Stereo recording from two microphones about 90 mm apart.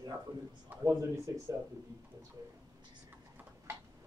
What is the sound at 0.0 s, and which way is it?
A man's voice, 45° right (ahead or behind).